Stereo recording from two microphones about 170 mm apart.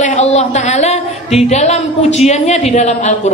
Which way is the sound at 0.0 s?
40° left (ahead or behind).